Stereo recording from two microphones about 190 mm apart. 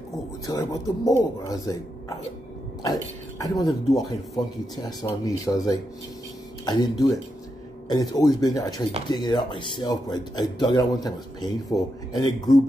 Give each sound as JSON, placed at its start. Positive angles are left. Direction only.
{"t": 0.5, "sound": "speech", "side_deg": 20}